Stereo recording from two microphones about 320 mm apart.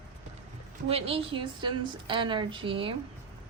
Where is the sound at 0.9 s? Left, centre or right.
Centre.